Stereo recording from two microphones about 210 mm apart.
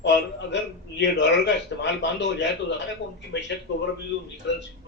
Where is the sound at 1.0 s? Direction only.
55° left (ahead or behind).